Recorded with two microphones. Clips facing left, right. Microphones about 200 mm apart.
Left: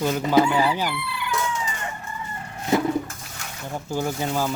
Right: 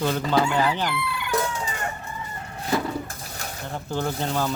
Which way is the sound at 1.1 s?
40° right (ahead or behind).